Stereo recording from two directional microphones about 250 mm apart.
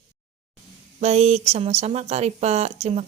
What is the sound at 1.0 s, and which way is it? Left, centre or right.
Speech, right.